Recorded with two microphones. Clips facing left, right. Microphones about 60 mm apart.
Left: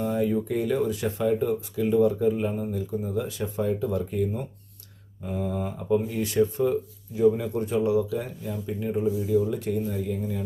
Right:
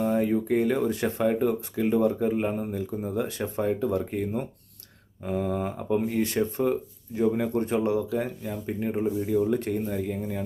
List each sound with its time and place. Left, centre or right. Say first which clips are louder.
0.0 s speech: right 1 dB; right
7.1 s speech: left 2 dB; right
9.0 s speech: left 2 dB; right
9.5 s speech: right 1 dB; right